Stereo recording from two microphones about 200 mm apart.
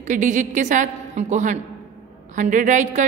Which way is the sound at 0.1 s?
40° right (ahead or behind).